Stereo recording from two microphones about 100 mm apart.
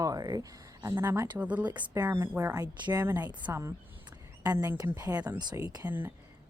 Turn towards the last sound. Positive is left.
turn(degrees=-20)  # may be behind; listen again after turning